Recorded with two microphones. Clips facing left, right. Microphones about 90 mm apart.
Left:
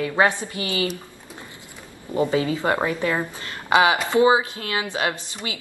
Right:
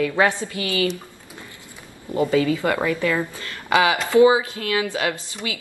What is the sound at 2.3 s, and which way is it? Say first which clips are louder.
Speech: right 4 dB; 25° left (ahead or behind).